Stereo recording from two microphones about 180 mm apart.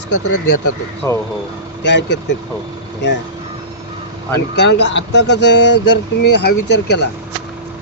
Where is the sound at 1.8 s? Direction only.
80° left.